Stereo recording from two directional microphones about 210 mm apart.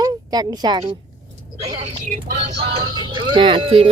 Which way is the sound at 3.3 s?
25° right (ahead or behind).